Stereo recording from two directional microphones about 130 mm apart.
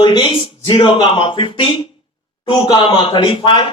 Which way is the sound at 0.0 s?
35° left (ahead or behind).